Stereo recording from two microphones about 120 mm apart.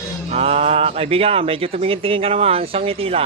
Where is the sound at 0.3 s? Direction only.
60° right (ahead or behind).